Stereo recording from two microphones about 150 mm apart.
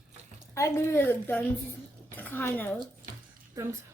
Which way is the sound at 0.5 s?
20° left (ahead or behind).